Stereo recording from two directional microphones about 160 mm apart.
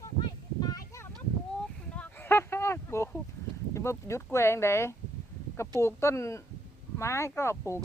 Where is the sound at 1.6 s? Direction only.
10° left (ahead or behind).